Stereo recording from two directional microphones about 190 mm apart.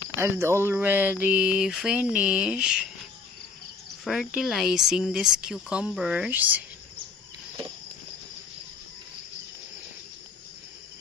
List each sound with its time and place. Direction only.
0.2 s speech: 15° right (ahead or behind)
4.0 s speech: centre (ahead or behind)